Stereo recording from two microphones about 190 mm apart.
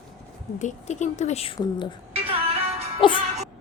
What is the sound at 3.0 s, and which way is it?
Speech, 25° left (ahead or behind).